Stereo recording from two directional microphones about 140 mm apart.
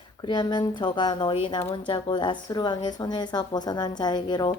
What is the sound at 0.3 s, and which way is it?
Speech, 35° left (ahead or behind).